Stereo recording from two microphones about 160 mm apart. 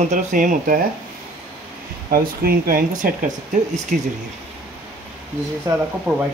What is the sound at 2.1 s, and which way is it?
Speech, 65° right (ahead or behind).